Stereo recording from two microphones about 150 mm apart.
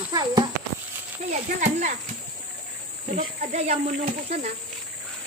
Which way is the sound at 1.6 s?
55° right (ahead or behind).